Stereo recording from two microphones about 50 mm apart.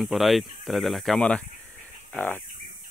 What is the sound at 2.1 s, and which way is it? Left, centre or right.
Speech, left.